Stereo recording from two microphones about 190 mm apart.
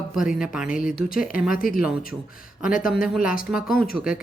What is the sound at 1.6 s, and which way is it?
Speech, 50° left (ahead or behind).